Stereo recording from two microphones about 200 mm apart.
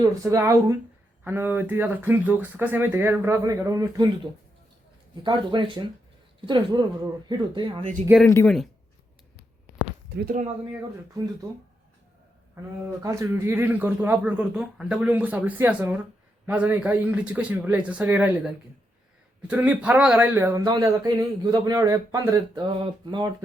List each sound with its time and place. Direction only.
0.0 s speech: 15° right (ahead or behind)
8.2 s speech: 10° left (ahead or behind)
10.1 s speech: 50° right (ahead or behind)
13.0 s speech: 15° right (ahead or behind)